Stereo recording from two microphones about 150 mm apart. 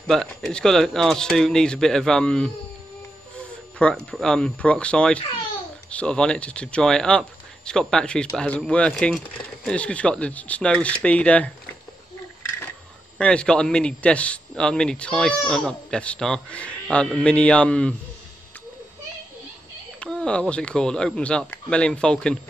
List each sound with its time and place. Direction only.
0.0 s a man's voice: 5° left (ahead or behind)
3.7 s a man's voice: 5° left (ahead or behind)
13.2 s a man's voice: 5° left (ahead or behind)
20.0 s speech: 5° left (ahead or behind)